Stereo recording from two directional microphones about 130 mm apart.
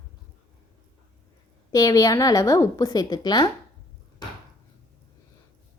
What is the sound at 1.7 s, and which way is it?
A woman's voice, 25° left (ahead or behind).